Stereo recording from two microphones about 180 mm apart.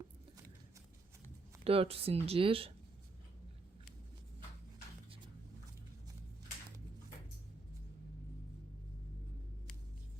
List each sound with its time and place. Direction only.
1.2 s speech: 30° right (ahead or behind)